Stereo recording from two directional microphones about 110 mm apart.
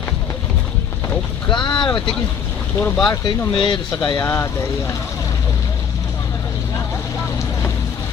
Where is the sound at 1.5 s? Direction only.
45° left (ahead or behind).